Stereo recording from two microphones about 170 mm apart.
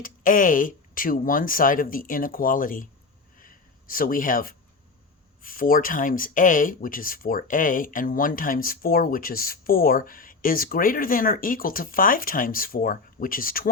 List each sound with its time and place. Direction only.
0.0 s speech: 55° left (ahead or behind)
3.3 s a sound: 55° left (ahead or behind)
5.4 s speech: 55° left (ahead or behind)